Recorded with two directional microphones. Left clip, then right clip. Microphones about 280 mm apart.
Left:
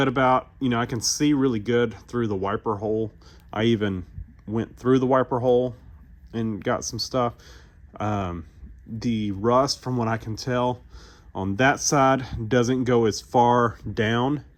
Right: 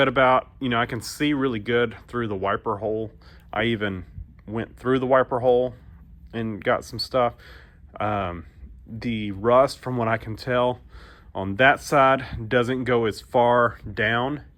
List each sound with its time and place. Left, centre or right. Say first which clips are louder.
0.0 s speech: right 2 dB; left